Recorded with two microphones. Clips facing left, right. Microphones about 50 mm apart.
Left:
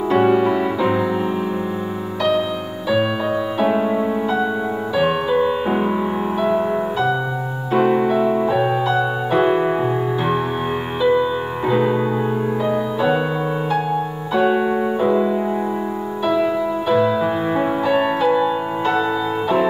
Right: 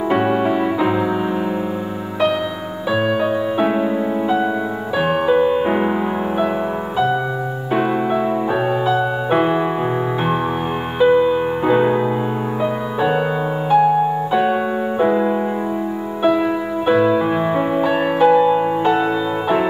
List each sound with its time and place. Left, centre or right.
0.1 s music: centre
3.7 s music: centre
5.3 s music: right
7.7 s music: centre
8.8 s music: right
11.0 s music: right
14.3 s piano: centre
15.0 s music: right
16.8 s music: right
17.8 s music: centre